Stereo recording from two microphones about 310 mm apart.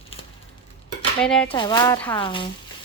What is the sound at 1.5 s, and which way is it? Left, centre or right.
Speech, centre.